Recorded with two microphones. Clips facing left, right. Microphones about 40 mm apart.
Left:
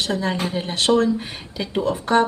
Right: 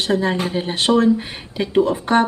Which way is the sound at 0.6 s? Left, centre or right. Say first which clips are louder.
Right 2 dB; right.